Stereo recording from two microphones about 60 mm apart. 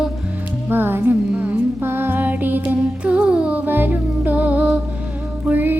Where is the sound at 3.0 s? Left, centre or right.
Centre.